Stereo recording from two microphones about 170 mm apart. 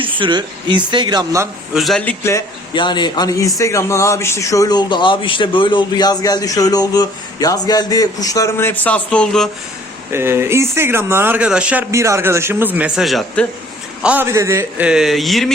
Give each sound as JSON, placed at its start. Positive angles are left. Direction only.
{"t": 0.0, "sound": "speech", "side_deg": -30}
{"t": 1.7, "sound": "a man's voice", "side_deg": 0}
{"t": 2.7, "sound": "a man's voice", "side_deg": 25}
{"t": 10.1, "sound": "speech", "side_deg": -15}
{"t": 14.0, "sound": "speech", "side_deg": -10}